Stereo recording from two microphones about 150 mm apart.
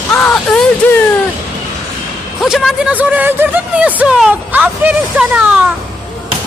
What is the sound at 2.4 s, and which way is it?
Speech, centre (ahead or behind).